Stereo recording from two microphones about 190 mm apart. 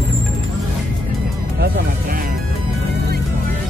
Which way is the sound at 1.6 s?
50° right (ahead or behind).